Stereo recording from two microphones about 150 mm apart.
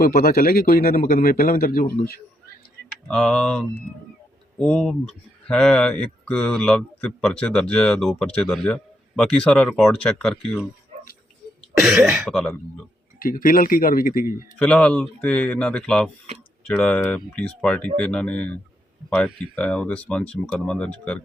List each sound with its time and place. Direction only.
0.0 s a man's voice: 80° left
3.1 s speech: 5° left (ahead or behind)
11.8 s speech: 5° right (ahead or behind)
13.1 s a man's voice: 70° left (ahead or behind)
14.6 s speech: 5° left (ahead or behind)